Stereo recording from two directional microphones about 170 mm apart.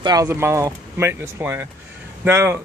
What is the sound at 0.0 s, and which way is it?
Speech, 20° right (ahead or behind).